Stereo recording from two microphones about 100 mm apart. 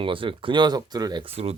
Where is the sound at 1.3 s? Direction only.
90° right.